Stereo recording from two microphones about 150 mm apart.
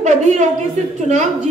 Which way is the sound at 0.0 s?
55° right (ahead or behind).